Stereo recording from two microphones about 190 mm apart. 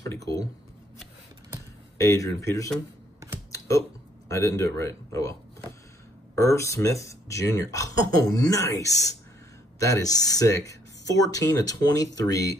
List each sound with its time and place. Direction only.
0.0 s speech: 15° left (ahead or behind)
2.0 s speech: 15° left (ahead or behind)
3.5 s computer keyboard: 15° left (ahead or behind)
4.3 s speech: 15° left (ahead or behind)
6.3 s speech: 15° left (ahead or behind)